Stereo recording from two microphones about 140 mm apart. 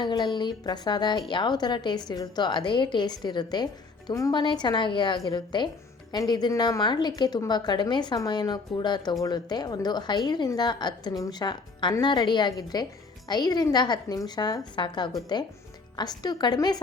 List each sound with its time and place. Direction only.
0.0 s a woman's voice: 35° left (ahead or behind)